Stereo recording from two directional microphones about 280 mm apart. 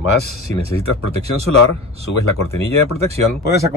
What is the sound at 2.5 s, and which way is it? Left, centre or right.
Speech, right.